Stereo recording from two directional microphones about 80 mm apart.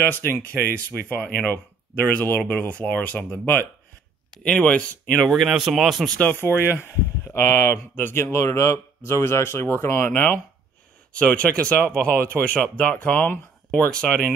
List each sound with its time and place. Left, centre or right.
0.1 s speech: left
5.2 s speech: centre
6.1 s speech: left
10.1 s speech: centre